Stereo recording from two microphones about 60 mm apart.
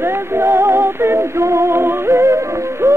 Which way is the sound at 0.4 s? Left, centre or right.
Right.